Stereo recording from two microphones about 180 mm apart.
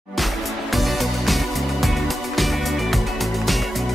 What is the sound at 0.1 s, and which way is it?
Music, centre (ahead or behind).